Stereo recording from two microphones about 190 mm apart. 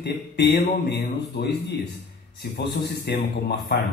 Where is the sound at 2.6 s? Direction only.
60° left (ahead or behind).